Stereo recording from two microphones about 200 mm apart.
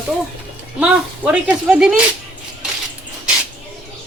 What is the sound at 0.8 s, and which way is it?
Speech, 5° right (ahead or behind).